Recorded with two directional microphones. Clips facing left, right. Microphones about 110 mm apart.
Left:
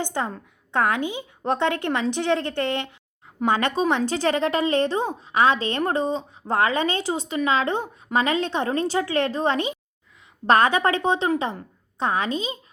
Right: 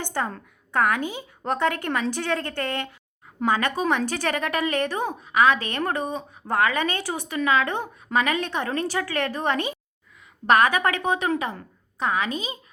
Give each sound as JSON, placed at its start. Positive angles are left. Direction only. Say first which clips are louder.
{"t": 0.0, "sound": "a woman's voice", "louder": "left 1 dB", "side_deg": 20}
{"t": 10.4, "sound": "a woman's voice", "louder": "left 1 dB", "side_deg": 30}